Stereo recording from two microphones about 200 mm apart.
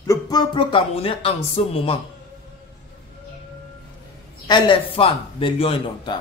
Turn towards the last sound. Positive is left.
turn(degrees=25)  # may be behind; listen again after turning